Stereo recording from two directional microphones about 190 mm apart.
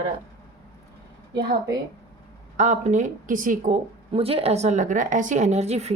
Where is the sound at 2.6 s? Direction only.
40° right (ahead or behind).